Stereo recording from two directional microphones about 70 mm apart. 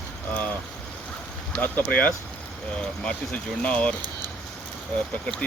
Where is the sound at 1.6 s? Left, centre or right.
Left.